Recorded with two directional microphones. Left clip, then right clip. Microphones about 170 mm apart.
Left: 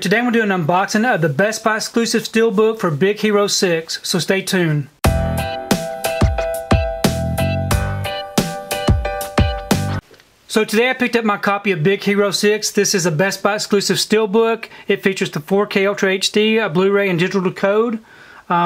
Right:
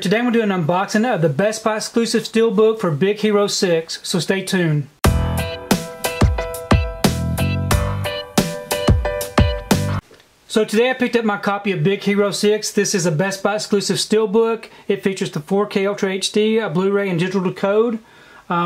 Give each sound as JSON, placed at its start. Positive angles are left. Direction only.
{"t": 0.0, "sound": "speech", "side_deg": 25}
{"t": 5.0, "sound": "music", "side_deg": 0}
{"t": 10.5, "sound": "speech", "side_deg": 25}